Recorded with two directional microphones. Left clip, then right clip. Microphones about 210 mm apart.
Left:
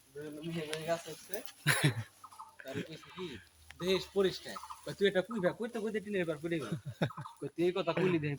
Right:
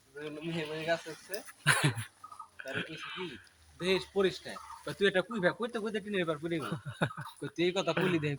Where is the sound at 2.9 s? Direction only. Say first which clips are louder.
Right 5 dB; 35° right (ahead or behind).